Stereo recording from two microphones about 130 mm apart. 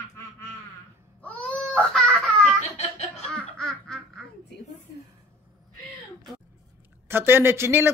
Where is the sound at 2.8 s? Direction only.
55° left (ahead or behind).